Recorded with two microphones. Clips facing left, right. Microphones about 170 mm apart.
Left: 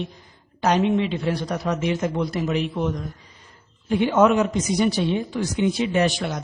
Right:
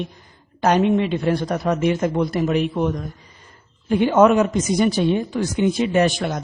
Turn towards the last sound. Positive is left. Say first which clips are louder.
# right 3 dB
turn(degrees=-50)  # may be behind; listen again after turning